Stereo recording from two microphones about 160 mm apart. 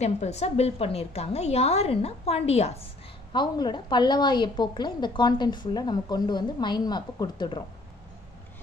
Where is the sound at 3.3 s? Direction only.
30° left (ahead or behind).